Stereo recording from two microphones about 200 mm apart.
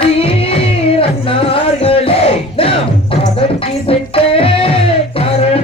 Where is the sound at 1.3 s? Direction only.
30° left (ahead or behind).